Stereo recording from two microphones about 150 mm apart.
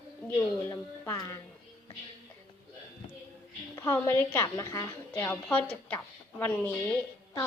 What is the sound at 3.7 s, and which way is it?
Speech, 15° left (ahead or behind).